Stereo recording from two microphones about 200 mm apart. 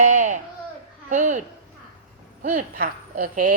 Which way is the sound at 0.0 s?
40° right (ahead or behind).